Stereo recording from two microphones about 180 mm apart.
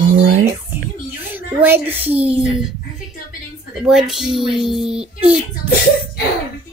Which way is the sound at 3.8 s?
Centre (ahead or behind).